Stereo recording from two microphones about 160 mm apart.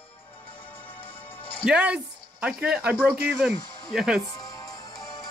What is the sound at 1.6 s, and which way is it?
Speech, 5° right (ahead or behind).